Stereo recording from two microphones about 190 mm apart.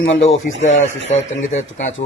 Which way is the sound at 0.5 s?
80° left.